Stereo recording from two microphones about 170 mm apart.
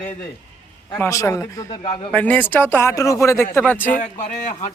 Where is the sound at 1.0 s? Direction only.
15° left (ahead or behind).